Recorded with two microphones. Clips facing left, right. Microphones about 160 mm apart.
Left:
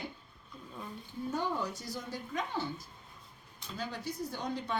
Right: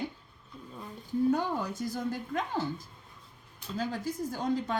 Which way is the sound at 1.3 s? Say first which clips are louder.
Right 4 dB; 50° right (ahead or behind).